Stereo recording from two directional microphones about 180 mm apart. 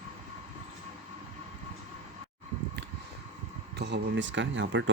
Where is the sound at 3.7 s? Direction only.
70° right (ahead or behind); by 4.9 s 90° right.